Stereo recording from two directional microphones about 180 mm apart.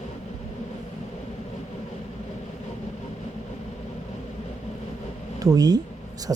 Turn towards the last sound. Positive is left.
turn(degrees=-20)  # may be behind; listen again after turning